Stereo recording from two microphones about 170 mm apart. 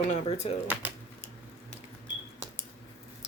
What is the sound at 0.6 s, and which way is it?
Speech, 10° right (ahead or behind).